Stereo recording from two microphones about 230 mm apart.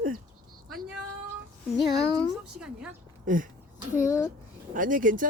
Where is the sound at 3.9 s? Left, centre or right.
Centre.